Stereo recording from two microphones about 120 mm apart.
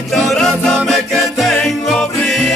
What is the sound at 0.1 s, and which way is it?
Music, centre (ahead or behind).